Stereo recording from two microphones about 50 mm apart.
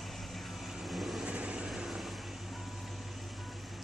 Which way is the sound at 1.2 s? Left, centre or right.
Right.